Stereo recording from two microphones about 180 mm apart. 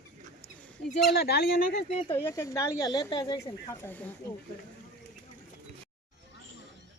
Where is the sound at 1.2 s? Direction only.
60° left (ahead or behind).